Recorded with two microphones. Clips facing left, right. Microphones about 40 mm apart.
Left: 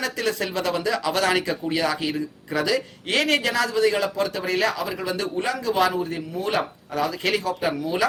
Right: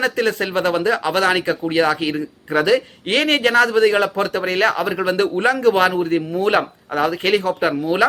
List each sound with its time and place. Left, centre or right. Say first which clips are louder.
0.0 s speech: right 6 dB; right